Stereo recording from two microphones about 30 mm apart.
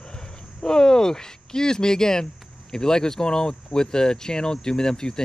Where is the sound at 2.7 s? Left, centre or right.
Left.